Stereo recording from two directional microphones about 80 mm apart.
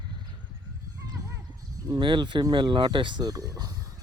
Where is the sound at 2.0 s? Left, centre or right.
Right.